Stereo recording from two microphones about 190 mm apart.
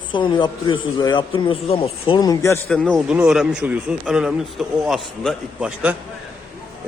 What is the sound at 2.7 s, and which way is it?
Speech, centre (ahead or behind).